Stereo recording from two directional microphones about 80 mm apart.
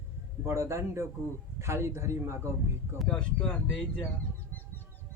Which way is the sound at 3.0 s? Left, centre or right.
Centre.